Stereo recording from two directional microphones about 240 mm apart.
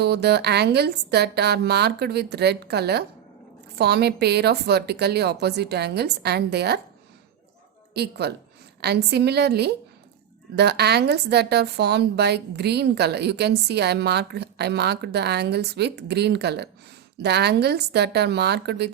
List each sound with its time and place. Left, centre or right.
0.0 s a woman's voice: right
7.9 s a woman's voice: right